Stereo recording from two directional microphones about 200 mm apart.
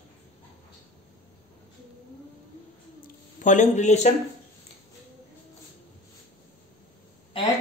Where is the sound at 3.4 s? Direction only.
35° left (ahead or behind).